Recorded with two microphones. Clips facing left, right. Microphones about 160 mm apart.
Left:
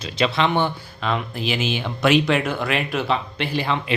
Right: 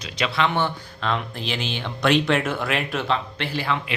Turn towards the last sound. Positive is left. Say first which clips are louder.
# left 2 dB
turn(degrees=20)  # may be behind; listen again after turning